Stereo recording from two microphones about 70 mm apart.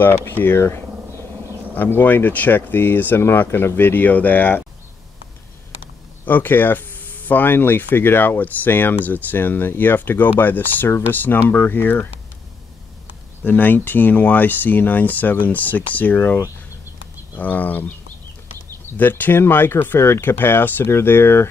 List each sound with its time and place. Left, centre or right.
0.0 s speech: left
1.8 s speech: left
6.2 s speech: left
13.4 s speech: left
17.4 s speech: left
18.9 s speech: left